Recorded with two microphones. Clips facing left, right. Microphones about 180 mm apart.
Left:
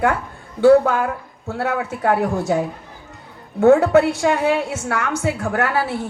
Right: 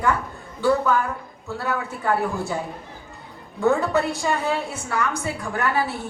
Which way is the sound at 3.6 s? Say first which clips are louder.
Left 8 dB; 65° left (ahead or behind).